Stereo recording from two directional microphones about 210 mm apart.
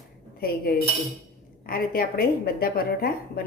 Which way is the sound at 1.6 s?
45° left (ahead or behind).